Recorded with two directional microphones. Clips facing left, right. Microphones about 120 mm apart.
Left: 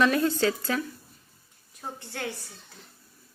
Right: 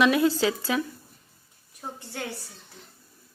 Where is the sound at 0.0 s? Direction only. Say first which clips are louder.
Right 2 dB; 15° right (ahead or behind).